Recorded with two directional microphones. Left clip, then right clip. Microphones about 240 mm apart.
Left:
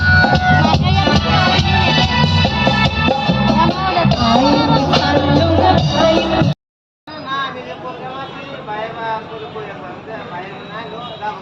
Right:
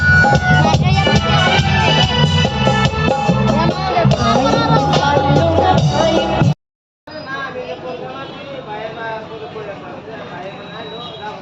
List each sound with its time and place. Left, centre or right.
0.2 s music: right